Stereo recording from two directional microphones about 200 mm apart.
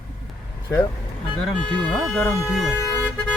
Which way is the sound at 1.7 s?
Centre (ahead or behind).